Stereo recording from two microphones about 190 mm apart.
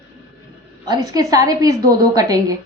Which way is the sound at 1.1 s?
20° right (ahead or behind).